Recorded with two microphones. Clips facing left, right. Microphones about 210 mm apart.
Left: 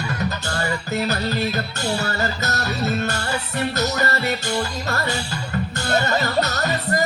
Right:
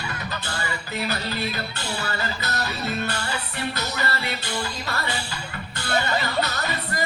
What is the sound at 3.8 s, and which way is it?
Music, 45° left (ahead or behind).